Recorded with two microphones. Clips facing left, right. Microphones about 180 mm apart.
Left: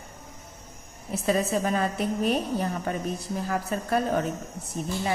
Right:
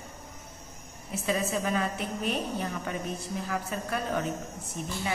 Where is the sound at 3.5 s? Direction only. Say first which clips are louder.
Left 6 dB; 40° left (ahead or behind).